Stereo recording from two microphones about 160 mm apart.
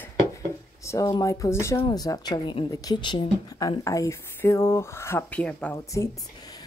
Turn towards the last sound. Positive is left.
turn(degrees=20)  # may be behind; listen again after turning